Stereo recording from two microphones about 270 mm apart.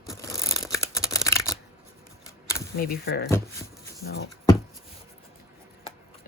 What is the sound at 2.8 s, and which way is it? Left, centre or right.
Speech, left.